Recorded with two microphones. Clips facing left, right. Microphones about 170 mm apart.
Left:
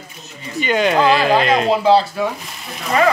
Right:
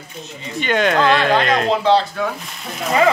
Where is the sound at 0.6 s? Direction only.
5° left (ahead or behind).